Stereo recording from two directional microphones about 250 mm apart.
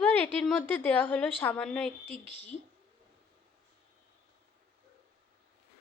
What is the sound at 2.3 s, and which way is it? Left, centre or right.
Speech, left.